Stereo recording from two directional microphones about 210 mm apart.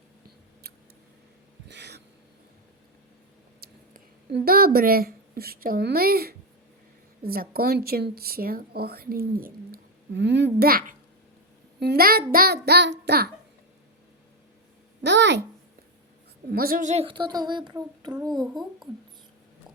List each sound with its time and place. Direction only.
1.6 s a sound: 55° right (ahead or behind)
3.6 s speech: 45° right (ahead or behind)
15.0 s a child's voice: 55° right (ahead or behind)
16.5 s a child's voice: 45° right (ahead or behind); by 18.1 s 20° right (ahead or behind)
18.5 s a child's voice: centre (ahead or behind)